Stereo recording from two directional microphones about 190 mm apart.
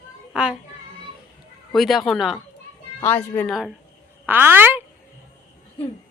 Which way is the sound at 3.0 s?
10° left (ahead or behind).